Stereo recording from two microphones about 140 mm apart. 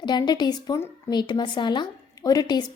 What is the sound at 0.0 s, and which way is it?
A woman's voice, 30° left (ahead or behind).